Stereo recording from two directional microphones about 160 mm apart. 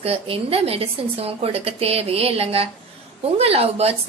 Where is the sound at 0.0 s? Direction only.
35° right (ahead or behind).